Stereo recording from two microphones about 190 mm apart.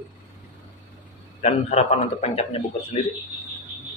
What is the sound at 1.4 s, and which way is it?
A man's voice, 35° left (ahead or behind).